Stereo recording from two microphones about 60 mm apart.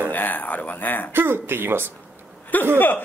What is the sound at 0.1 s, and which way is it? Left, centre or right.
Speech, left.